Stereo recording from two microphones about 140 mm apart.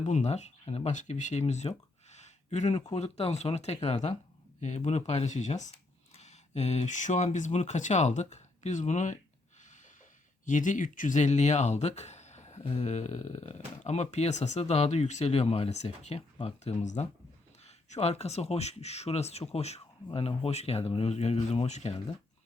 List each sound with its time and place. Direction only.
0.0 s speech: 55° left (ahead or behind)
10.4 s speech: 65° left (ahead or behind); by 21.9 s 50° left (ahead or behind)